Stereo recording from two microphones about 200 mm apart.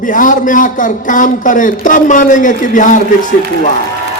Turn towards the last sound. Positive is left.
turn(degrees=40)  # may be behind; listen again after turning